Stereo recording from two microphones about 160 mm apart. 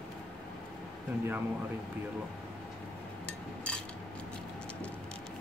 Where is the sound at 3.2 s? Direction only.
5° left (ahead or behind).